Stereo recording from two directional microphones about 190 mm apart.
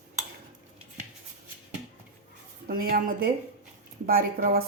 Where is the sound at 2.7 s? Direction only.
50° right (ahead or behind).